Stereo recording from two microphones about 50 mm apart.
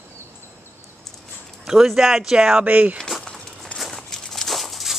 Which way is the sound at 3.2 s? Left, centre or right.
Centre.